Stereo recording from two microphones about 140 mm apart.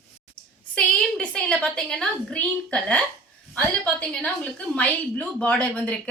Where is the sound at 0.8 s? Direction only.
5° left (ahead or behind).